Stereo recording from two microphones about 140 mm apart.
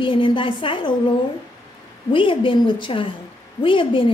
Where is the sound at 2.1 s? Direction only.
35° left (ahead or behind).